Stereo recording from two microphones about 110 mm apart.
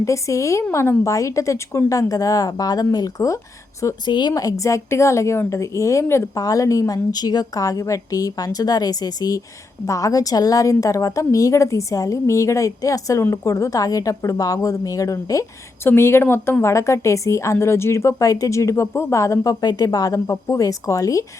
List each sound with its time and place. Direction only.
0.0 s a woman's voice: 30° left (ahead or behind)
4.0 s a woman's voice: 40° left (ahead or behind)